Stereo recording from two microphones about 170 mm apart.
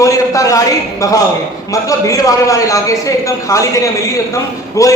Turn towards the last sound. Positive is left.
turn(degrees=20)  # may be behind; listen again after turning